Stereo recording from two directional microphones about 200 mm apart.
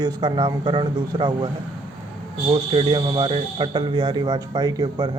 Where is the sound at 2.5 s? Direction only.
25° right (ahead or behind).